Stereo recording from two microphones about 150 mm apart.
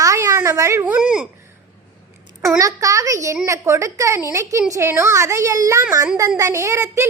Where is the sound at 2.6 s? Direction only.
20° right (ahead or behind).